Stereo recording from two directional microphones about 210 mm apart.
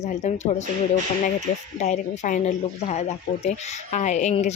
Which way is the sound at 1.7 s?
35° left (ahead or behind).